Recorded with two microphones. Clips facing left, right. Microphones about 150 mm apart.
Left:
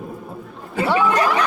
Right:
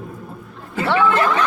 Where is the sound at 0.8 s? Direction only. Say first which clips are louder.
Even; 15° left (ahead or behind).